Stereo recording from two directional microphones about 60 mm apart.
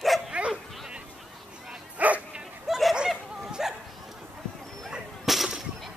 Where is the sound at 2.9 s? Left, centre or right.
Centre.